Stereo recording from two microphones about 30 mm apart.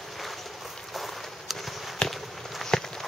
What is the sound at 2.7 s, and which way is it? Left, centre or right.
Clip-clop, left.